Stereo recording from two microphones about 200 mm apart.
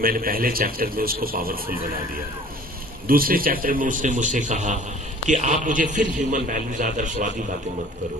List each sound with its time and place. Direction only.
0.0 s a man's voice: 45° right (ahead or behind)
3.1 s a man's voice: 45° right (ahead or behind)